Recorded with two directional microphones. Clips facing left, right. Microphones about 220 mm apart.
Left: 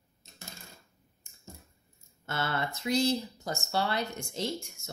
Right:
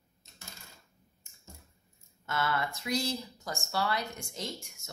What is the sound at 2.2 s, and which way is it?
Speech, 30° left (ahead or behind).